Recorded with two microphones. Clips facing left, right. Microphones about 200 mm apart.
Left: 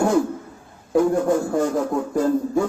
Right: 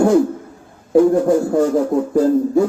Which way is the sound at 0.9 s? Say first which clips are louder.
Right 6 dB; 30° right (ahead or behind).